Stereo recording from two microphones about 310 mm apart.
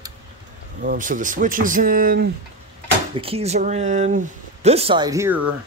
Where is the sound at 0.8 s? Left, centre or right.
Right.